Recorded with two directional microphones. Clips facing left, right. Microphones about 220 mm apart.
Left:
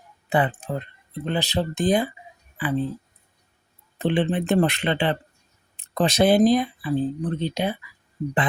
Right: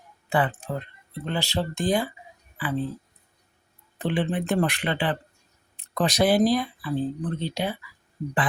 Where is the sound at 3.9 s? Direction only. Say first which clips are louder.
Left 4 dB; 25° left (ahead or behind).